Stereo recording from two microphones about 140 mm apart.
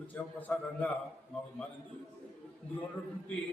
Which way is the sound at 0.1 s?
10° left (ahead or behind).